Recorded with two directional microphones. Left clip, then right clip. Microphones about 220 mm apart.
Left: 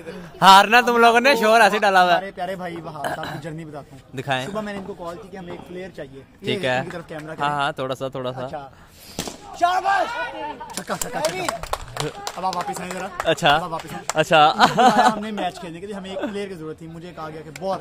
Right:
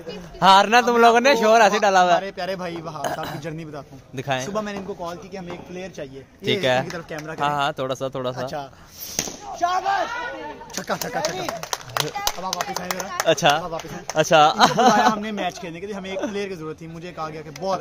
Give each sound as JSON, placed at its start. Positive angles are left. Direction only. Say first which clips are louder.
{"t": 0.4, "sound": "a man's voice", "louder": "left 3 dB", "side_deg": 0}
{"t": 6.4, "sound": "a man's voice", "louder": "right 2 dB", "side_deg": -5}
{"t": 9.6, "sound": "speech", "louder": "left 3 dB", "side_deg": 40}
{"t": 11.9, "sound": "speech", "louder": "right 4 dB", "side_deg": -35}
{"t": 13.3, "sound": "a man's voice", "louder": "left 1 dB", "side_deg": 0}